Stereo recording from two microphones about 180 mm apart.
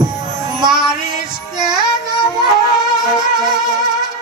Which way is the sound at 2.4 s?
25° right (ahead or behind).